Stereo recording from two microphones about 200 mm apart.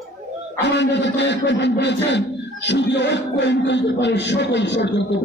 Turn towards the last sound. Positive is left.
turn(degrees=60)  # may be behind; listen again after turning